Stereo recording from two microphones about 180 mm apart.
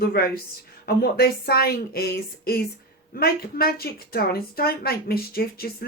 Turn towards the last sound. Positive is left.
turn(degrees=55)  # may be behind; listen again after turning